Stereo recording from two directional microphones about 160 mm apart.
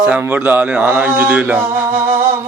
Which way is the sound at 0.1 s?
10° right (ahead or behind).